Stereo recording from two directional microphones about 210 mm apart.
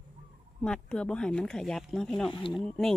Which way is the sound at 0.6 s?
5° left (ahead or behind).